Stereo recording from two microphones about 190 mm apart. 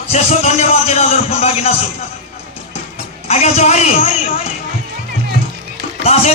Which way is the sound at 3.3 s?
35° left (ahead or behind).